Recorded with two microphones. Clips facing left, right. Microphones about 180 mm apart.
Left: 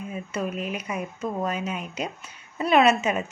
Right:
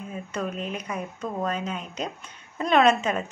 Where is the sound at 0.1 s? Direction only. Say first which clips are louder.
Left 1 dB; 10° left (ahead or behind).